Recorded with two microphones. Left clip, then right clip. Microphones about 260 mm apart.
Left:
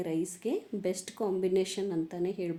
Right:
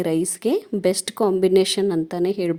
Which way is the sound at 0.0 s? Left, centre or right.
Right.